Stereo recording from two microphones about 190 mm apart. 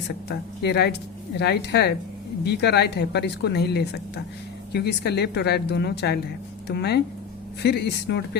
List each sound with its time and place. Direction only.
0.3 s a woman's voice: 60° left (ahead or behind)